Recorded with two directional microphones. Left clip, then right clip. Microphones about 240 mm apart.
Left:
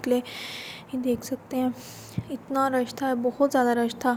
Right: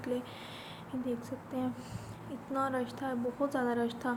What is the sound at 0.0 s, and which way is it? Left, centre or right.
A woman's voice, left.